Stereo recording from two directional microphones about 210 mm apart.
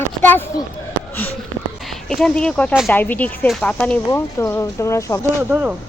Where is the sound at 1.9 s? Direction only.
Centre (ahead or behind).